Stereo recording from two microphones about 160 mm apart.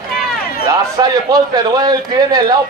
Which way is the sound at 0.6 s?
25° right (ahead or behind).